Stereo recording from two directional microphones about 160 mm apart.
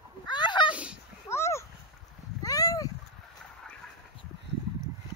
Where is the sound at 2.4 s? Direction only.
20° left (ahead or behind).